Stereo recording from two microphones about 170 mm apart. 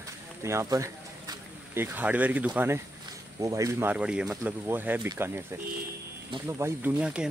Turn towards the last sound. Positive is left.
turn(degrees=-5)  # may be behind; listen again after turning